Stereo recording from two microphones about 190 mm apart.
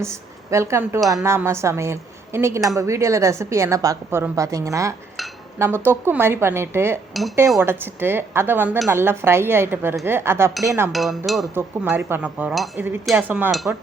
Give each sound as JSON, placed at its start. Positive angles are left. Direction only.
{"t": 0.0, "sound": "a woman's voice", "side_deg": -15}
{"t": 7.1, "sound": "dishes", "side_deg": 0}
{"t": 7.6, "sound": "a woman's voice", "side_deg": -10}
{"t": 10.9, "sound": "speech", "side_deg": 0}
{"t": 11.5, "sound": "a woman's voice", "side_deg": -10}